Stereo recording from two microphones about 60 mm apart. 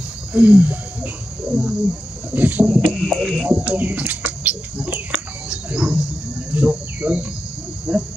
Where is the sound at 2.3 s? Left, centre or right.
Right.